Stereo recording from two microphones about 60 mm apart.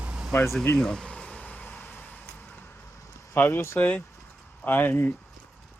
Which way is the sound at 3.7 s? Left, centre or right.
Left.